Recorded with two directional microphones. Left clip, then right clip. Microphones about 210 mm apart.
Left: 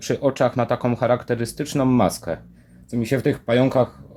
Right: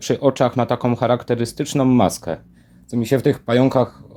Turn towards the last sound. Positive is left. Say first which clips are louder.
# right 2 dB
turn(degrees=-20)  # may be behind; listen again after turning